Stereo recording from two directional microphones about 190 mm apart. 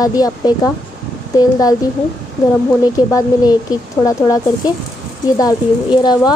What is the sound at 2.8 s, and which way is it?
A child's voice, 20° left (ahead or behind).